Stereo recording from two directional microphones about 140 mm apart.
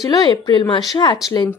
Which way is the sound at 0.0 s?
30° left (ahead or behind).